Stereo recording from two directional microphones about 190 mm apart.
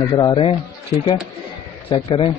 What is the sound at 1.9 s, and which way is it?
Speech, 30° left (ahead or behind).